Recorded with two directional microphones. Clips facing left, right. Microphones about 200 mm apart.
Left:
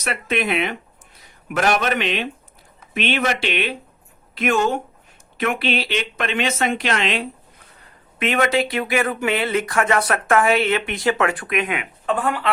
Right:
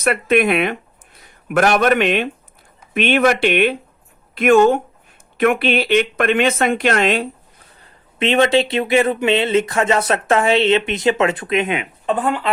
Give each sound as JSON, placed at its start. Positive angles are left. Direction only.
{"t": 0.0, "sound": "speech", "side_deg": -55}
{"t": 7.8, "sound": "speech", "side_deg": -30}